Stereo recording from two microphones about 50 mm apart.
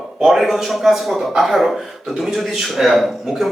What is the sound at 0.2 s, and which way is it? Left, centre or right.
A man's voice, centre.